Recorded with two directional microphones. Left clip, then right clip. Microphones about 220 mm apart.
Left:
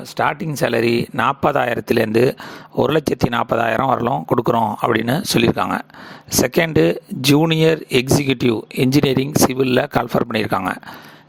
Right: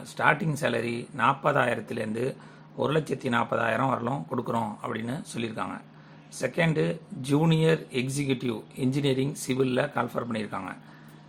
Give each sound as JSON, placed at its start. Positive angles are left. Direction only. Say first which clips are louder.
{"t": 0.2, "sound": "speech", "louder": "left 6 dB", "side_deg": 40}